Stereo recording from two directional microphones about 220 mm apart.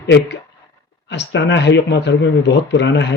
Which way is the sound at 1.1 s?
50° left (ahead or behind).